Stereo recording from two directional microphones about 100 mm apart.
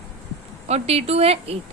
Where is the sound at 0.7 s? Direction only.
90° right.